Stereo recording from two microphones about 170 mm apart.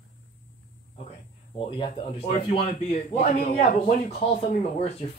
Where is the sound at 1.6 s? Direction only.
30° left (ahead or behind).